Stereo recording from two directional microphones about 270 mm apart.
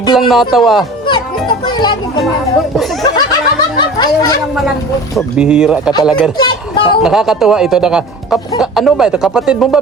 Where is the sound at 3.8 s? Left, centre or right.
Centre.